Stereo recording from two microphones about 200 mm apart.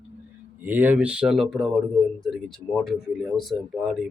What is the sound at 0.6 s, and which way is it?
Speech, 10° right (ahead or behind).